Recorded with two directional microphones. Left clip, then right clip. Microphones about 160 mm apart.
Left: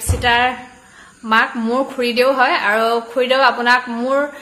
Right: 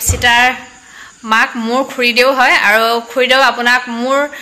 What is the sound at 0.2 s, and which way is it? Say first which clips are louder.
Speech: right 5 dB; 10° right (ahead or behind).